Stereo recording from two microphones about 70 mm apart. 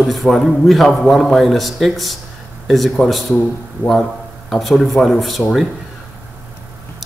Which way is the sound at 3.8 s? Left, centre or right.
Right.